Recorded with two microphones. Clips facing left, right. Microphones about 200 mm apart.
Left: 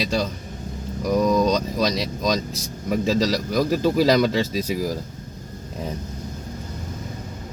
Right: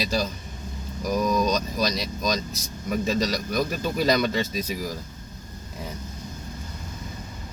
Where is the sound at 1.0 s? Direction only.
25° left (ahead or behind).